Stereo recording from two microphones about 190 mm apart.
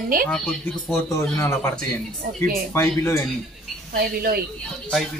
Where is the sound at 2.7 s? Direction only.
15° left (ahead or behind).